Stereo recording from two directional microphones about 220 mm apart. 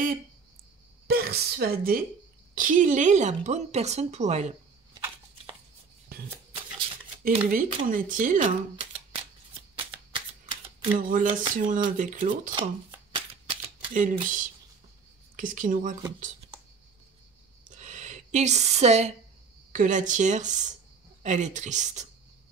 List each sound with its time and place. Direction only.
1.0 s a woman's voice: 45° right (ahead or behind)
4.9 s a sound: 20° right (ahead or behind)
6.1 s a sound: 45° right (ahead or behind)
7.2 s a woman's voice: 40° right (ahead or behind)
9.8 s typewriter: 20° right (ahead or behind)
11.0 s a woman's voice: 40° right (ahead or behind)
13.1 s typewriter: 20° right (ahead or behind)
14.2 s a woman's voice: 35° right (ahead or behind)
17.6 s a sound: 35° right (ahead or behind)
19.7 s a woman's voice: 35° right (ahead or behind)